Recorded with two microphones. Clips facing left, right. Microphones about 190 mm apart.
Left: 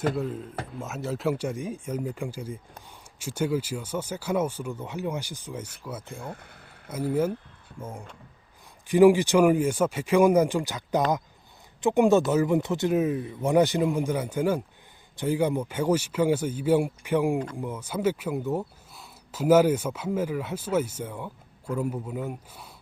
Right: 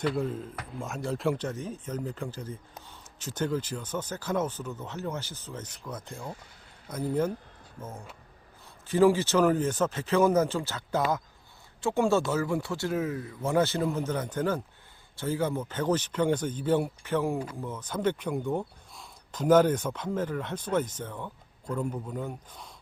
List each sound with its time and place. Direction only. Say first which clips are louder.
0.2 s a man's voice: left 1 dB; centre (ahead or behind)
6.2 s speech: left 2 dB; 55° left (ahead or behind)
6.8 s speech: left 3 dB; 5° left (ahead or behind)